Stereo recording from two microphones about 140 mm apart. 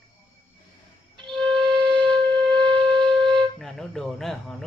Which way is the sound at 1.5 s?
30° right (ahead or behind).